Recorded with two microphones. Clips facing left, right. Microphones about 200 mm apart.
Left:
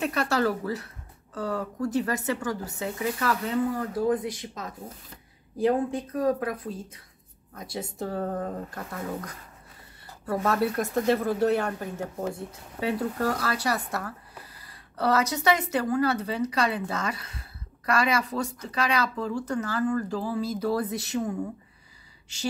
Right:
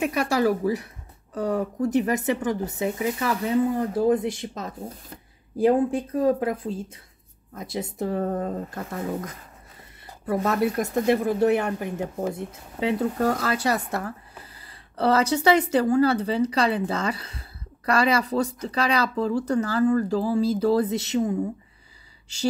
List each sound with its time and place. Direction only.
0.0 s speech: 10° right (ahead or behind)